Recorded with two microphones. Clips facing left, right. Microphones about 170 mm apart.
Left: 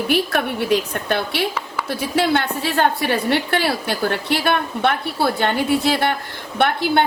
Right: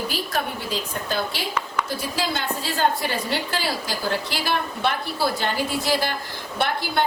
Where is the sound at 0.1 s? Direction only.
65° left (ahead or behind).